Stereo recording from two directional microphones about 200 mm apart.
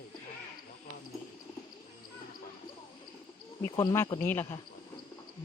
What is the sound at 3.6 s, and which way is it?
Speech, 15° left (ahead or behind).